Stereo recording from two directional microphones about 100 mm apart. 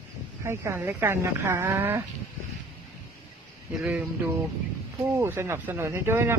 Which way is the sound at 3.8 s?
15° right (ahead or behind).